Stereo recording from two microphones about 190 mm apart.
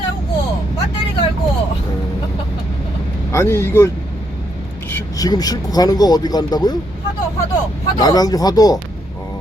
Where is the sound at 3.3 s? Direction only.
15° left (ahead or behind).